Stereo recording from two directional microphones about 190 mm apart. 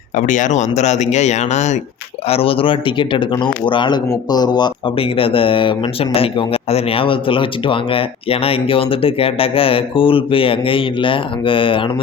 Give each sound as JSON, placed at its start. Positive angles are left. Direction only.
{"t": 0.2, "sound": "speech", "side_deg": 40}